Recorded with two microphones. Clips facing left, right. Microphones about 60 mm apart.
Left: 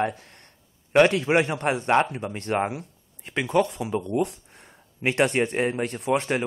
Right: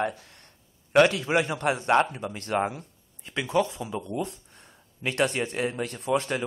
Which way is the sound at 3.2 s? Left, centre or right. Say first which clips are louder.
Left 3 dB; left.